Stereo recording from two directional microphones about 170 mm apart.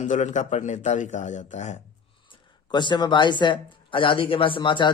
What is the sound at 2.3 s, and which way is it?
Speech, 25° left (ahead or behind).